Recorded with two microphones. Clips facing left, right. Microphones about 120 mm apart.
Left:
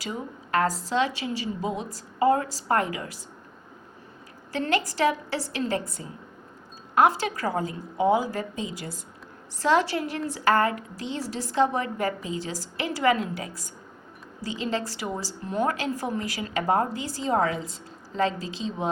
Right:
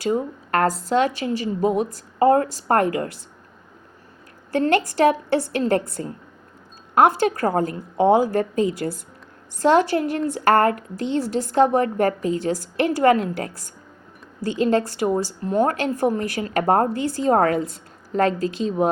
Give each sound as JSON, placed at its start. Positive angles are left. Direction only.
{"t": 0.0, "sound": "speech", "side_deg": -50}
{"t": 4.5, "sound": "speech", "side_deg": -50}
{"t": 14.5, "sound": "speech", "side_deg": -50}